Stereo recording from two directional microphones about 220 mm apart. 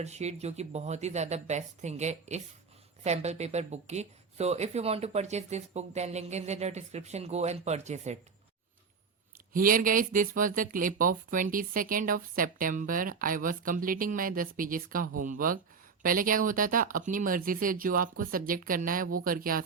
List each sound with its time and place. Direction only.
0.0 s speech: 30° right (ahead or behind)
9.5 s speech: 40° right (ahead or behind)